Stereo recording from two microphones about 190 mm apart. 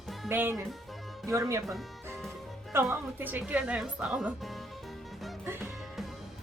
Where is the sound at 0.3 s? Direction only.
10° right (ahead or behind).